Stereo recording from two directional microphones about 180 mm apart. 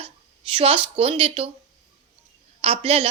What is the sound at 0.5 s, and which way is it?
Speech, 30° right (ahead or behind).